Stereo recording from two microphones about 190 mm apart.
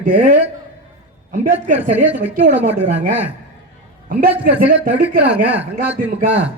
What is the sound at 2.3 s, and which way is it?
Speech, 40° right (ahead or behind).